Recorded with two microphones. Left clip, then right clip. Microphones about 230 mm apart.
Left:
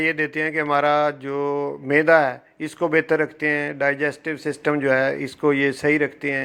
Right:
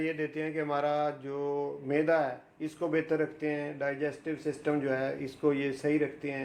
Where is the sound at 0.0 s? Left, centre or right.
Left.